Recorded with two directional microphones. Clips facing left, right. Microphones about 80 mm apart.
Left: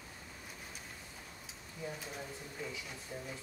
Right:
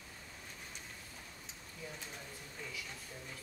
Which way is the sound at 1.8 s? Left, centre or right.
Centre.